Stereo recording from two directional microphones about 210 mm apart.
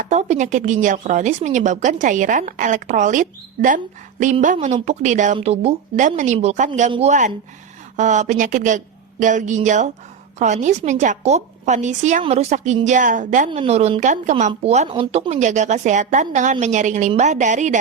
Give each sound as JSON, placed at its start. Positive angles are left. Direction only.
{"t": 0.0, "sound": "speech", "side_deg": -35}